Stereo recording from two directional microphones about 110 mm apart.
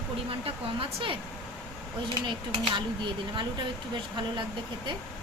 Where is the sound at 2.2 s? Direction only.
45° right (ahead or behind).